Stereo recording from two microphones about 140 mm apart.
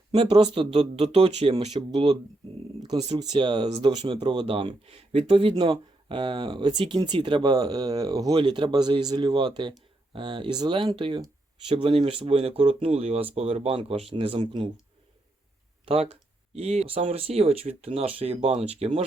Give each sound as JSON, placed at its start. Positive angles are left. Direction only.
{"t": 0.1, "sound": "speech", "side_deg": -40}
{"t": 15.9, "sound": "speech", "side_deg": -45}
{"t": 18.3, "sound": "speech", "side_deg": -55}